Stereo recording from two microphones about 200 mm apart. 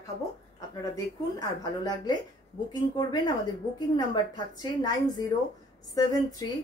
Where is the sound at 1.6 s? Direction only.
20° left (ahead or behind).